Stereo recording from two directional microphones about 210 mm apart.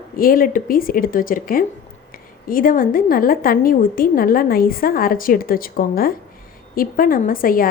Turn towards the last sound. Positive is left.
turn(degrees=40)  # may be behind; listen again after turning